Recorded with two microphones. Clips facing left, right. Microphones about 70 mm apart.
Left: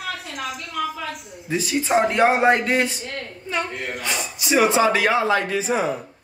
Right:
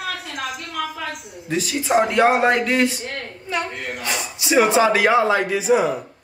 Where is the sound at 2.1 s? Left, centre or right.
Centre.